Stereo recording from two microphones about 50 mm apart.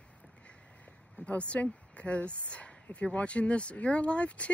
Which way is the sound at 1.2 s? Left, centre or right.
Left.